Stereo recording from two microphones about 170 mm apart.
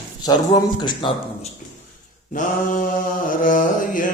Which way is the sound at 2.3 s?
50° left (ahead or behind).